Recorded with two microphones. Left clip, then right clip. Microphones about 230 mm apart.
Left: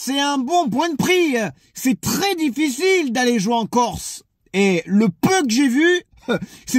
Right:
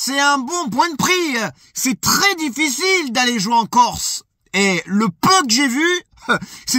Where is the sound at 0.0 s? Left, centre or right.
Right.